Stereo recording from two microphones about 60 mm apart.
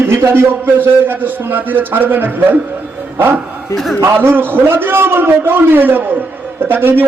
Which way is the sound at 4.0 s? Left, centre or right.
Right.